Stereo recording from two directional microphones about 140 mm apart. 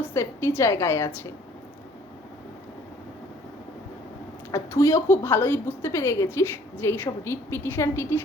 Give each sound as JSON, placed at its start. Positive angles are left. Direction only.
{"t": 0.0, "sound": "a woman's voice", "side_deg": 20}
{"t": 4.5, "sound": "a woman's voice", "side_deg": 20}